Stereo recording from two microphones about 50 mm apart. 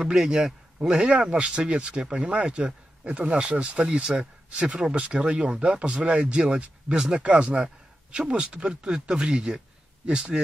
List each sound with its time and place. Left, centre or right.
0.0 s a man's voice: centre
0.7 s speech: right
7.2 s speech: right
7.6 s a sound: centre
8.3 s a man's voice: right